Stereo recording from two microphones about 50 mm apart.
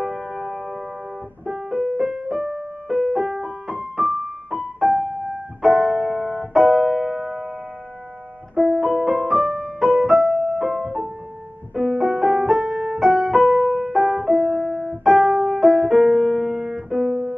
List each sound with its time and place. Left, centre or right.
0.0 s music: centre
3.9 s keyboard: centre
7.2 s music: centre
8.9 s music: centre
9.4 s music: centre
9.8 s music: centre
11.7 s piano: centre
13.0 s keyboard: centre
13.5 s music: centre
13.9 s piano: centre